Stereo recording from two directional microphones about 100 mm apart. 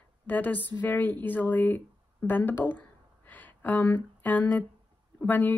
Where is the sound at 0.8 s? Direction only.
15° left (ahead or behind).